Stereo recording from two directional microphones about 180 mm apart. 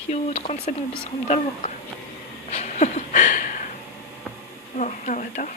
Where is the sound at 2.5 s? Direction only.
40° left (ahead or behind).